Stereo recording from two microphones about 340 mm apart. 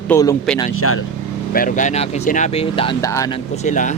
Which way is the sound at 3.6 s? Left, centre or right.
Left.